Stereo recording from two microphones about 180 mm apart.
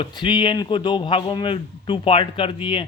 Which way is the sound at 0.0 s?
25° left (ahead or behind).